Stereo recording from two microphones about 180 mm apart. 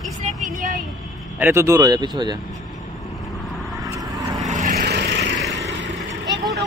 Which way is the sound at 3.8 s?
20° right (ahead or behind).